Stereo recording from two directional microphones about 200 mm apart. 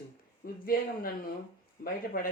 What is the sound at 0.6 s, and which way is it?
Speech, 45° left (ahead or behind).